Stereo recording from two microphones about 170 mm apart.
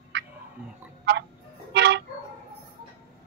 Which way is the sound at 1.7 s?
90° right.